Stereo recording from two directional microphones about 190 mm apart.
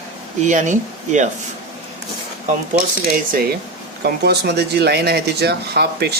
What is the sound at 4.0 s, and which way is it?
Speech, 60° right (ahead or behind).